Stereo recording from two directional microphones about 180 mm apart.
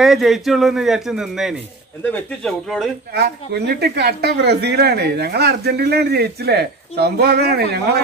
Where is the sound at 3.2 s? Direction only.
65° right (ahead or behind).